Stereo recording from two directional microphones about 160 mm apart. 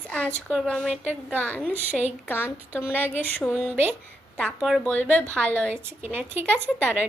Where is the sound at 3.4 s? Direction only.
5° right (ahead or behind).